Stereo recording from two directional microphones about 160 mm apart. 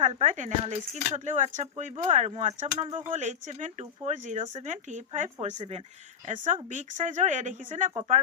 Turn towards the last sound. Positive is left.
turn(degrees=-50)  # may be behind; listen again after turning